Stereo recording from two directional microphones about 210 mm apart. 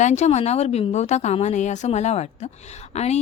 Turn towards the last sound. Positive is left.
turn(degrees=30)  # may be behind; listen again after turning